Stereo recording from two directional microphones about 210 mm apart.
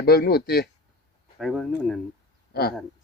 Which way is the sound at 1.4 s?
Centre (ahead or behind).